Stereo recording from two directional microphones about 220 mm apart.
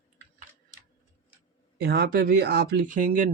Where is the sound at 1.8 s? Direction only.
45° right (ahead or behind).